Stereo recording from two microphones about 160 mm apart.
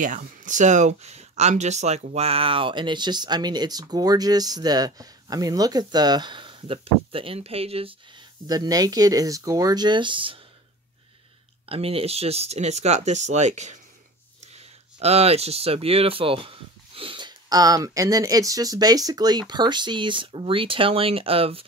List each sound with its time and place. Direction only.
0.0 s speech: 55° right (ahead or behind); by 7.9 s 35° right (ahead or behind)
8.5 s speech: 25° right (ahead or behind)
11.7 s speech: 35° right (ahead or behind)
15.0 s speech: 40° right (ahead or behind)